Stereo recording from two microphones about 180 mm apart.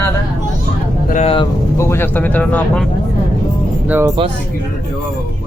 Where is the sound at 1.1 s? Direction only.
40° left (ahead or behind).